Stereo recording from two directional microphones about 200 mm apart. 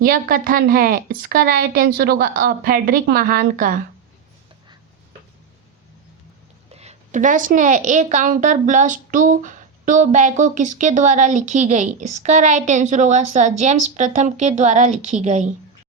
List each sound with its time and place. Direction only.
0.0 s a woman's voice: 45° right (ahead or behind)
6.7 s a woman's voice: 35° right (ahead or behind)